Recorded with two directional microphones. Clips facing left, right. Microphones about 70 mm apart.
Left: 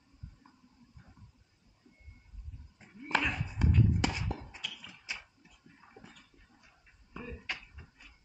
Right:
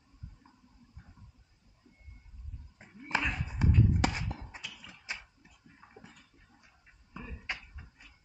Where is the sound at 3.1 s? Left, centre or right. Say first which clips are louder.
Left 1 dB; centre.